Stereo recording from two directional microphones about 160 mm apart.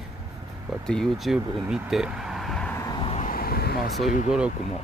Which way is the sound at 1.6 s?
5° right (ahead or behind).